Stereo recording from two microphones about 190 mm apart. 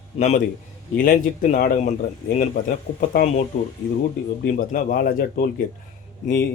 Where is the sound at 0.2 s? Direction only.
40° left (ahead or behind).